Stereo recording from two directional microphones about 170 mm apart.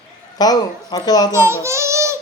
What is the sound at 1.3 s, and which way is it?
Child singing, 15° right (ahead or behind).